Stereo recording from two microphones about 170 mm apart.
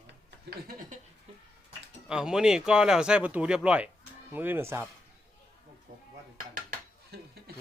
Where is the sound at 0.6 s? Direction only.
55° right (ahead or behind).